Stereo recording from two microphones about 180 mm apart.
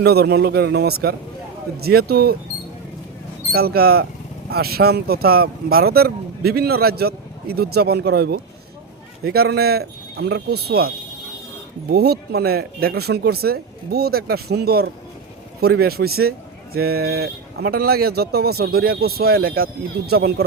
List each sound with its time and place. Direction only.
0.0 s speech: 65° right (ahead or behind)
3.5 s speech: 60° right (ahead or behind)